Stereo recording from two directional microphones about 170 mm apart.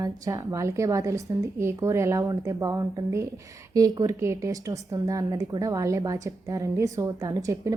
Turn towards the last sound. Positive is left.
turn(degrees=-20)  # may be behind; listen again after turning